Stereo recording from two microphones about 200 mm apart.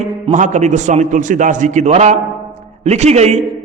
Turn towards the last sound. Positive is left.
turn(degrees=-35)  # may be behind; listen again after turning